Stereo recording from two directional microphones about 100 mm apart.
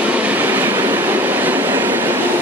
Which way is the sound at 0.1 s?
15° right (ahead or behind).